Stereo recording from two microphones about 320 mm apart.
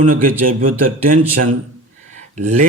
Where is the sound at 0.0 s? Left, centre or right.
Right.